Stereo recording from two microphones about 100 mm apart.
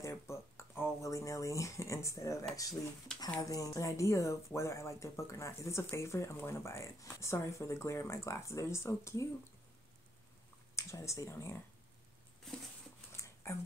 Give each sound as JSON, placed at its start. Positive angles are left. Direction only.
{"t": 0.0, "sound": "a sound", "side_deg": 30}
{"t": 1.1, "sound": "speech", "side_deg": 30}
{"t": 10.8, "sound": "speech", "side_deg": 30}
{"t": 13.2, "sound": "dog", "side_deg": 25}